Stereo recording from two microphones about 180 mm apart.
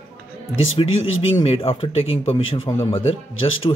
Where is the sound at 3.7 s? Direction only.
25° left (ahead or behind).